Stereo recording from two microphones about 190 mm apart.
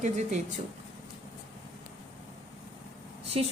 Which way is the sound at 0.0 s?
40° right (ahead or behind).